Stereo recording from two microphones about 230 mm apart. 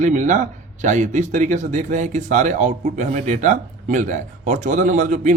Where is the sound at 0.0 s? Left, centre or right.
Right.